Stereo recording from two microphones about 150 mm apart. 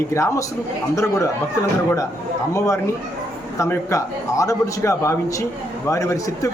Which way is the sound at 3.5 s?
20° left (ahead or behind).